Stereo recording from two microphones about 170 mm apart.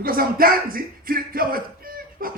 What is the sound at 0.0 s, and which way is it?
Music, 60° right (ahead or behind).